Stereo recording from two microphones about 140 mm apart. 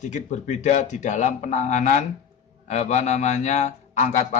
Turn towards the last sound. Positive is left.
turn(degrees=60)  # may be behind; listen again after turning